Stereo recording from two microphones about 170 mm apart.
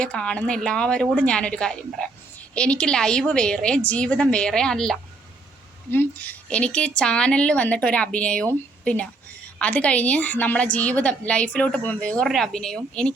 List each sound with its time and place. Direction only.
0.0 s a woman's voice: 5° left (ahead or behind)